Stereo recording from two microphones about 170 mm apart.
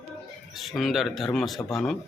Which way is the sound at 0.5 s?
Centre (ahead or behind).